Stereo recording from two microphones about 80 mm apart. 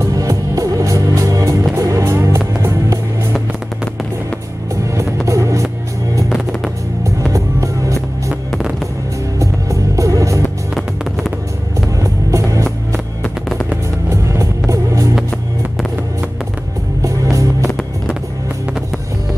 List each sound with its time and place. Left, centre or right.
0.0 s music: right
4.9 s music: right
7.3 s music: right
9.4 s music: right
10.7 s music: centre
12.0 s music: right
13.2 s music: centre
14.0 s music: right
17.0 s music: right